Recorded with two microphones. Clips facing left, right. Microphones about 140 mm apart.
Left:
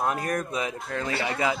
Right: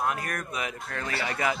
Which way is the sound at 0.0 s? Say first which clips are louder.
Left 4 dB; 30° left (ahead or behind).